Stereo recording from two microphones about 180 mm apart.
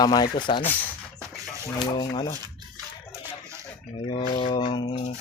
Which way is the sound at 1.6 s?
20° left (ahead or behind).